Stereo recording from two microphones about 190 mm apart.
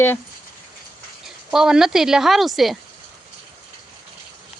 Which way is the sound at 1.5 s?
5° right (ahead or behind).